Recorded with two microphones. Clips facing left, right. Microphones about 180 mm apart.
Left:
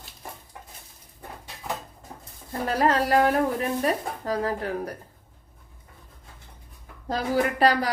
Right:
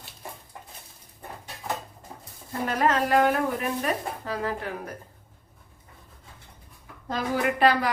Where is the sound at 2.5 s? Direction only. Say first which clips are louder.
Left 1 dB; 35° left (ahead or behind).